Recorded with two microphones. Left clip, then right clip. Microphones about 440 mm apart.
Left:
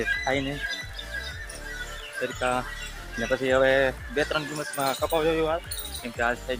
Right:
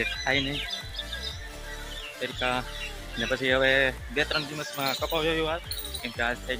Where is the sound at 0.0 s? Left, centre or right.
Right.